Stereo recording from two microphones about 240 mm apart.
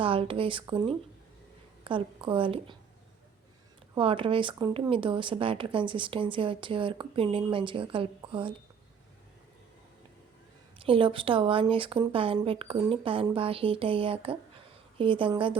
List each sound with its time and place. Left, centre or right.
0.0 s speech: right
3.9 s speech: right
10.8 s speech: right